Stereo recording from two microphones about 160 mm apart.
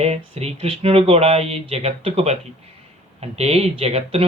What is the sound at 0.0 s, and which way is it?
Speech, 40° right (ahead or behind).